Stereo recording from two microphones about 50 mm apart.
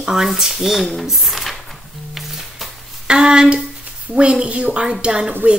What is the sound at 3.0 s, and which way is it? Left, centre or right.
A woman's voice, centre.